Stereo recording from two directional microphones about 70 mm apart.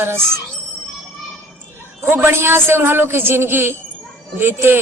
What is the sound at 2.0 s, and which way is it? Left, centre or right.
A woman's voice, right.